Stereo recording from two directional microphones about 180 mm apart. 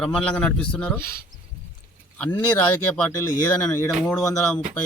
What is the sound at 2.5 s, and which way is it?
Speech, 5° left (ahead or behind).